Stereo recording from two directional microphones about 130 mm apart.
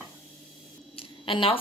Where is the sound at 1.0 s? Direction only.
45° left (ahead or behind).